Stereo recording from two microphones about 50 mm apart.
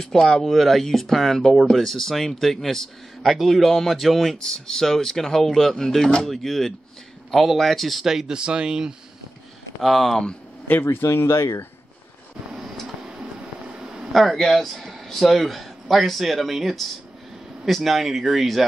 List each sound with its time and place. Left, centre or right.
0.0 s speech: centre
9.8 s speech: centre
10.7 s speech: left
11.0 s speech: left
13.7 s a sound: centre
14.1 s speech: centre